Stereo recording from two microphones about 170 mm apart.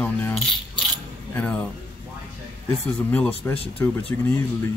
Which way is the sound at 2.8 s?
5° left (ahead or behind).